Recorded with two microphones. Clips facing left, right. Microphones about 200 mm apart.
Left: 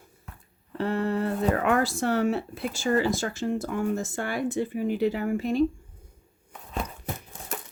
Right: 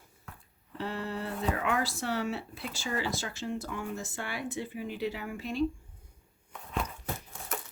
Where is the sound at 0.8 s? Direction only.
55° left (ahead or behind).